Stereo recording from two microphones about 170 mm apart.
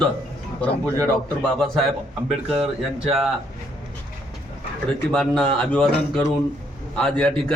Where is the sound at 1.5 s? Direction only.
Centre (ahead or behind).